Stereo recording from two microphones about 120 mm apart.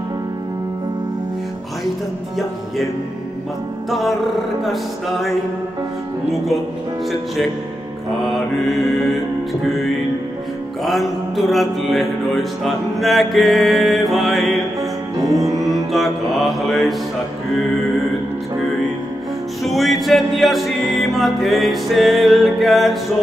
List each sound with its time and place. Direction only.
3.9 s music: centre (ahead or behind)
6.3 s music: centre (ahead or behind)
8.3 s music: centre (ahead or behind)
10.8 s music: centre (ahead or behind)
15.1 s music: 30° right (ahead or behind)
15.9 s music: centre (ahead or behind)
19.6 s music: centre (ahead or behind)